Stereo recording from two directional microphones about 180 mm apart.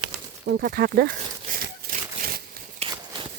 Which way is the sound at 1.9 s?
55° right (ahead or behind).